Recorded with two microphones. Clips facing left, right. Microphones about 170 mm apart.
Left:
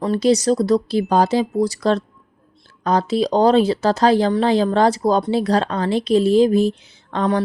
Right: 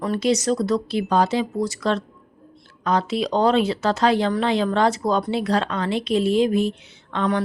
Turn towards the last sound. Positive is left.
turn(degrees=35)  # may be behind; listen again after turning